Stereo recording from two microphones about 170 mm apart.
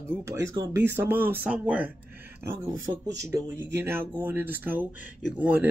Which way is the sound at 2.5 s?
20° right (ahead or behind).